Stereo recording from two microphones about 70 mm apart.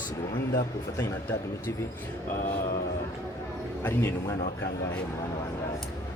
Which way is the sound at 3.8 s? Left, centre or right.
Left.